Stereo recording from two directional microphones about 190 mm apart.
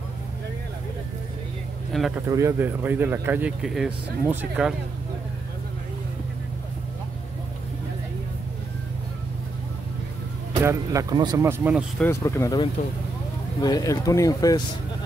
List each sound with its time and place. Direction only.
1.9 s speech: centre (ahead or behind)
2.2 s speech: 15° right (ahead or behind)
10.6 s speech: 15° right (ahead or behind)
12.0 s speech: 15° left (ahead or behind)